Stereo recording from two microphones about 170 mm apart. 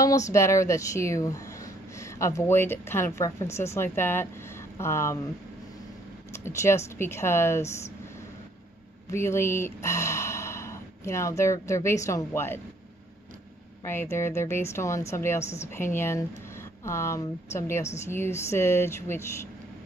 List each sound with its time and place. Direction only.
0.3 s speech: 15° left (ahead or behind)
6.3 s speech: 15° left (ahead or behind)
9.1 s speech: 15° left (ahead or behind)
13.8 s speech: 15° left (ahead or behind)